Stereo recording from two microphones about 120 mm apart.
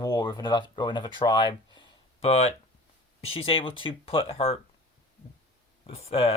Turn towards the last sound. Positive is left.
turn(degrees=55)  # may be behind; listen again after turning